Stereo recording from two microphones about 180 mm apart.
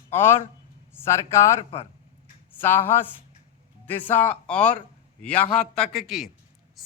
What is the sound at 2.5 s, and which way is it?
Speech, 10° left (ahead or behind).